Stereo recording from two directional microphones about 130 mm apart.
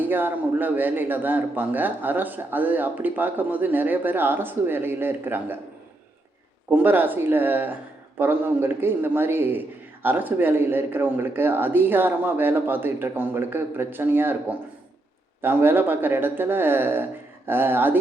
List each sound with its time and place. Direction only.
0.0 s a man's voice: 15° right (ahead or behind)
6.7 s a man's voice: 15° right (ahead or behind)
15.4 s a man's voice: 15° right (ahead or behind)